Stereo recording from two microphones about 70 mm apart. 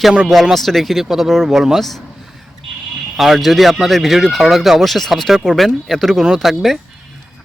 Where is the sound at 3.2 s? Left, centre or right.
Centre.